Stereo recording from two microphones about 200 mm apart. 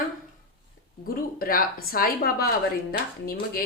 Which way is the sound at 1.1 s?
45° left (ahead or behind).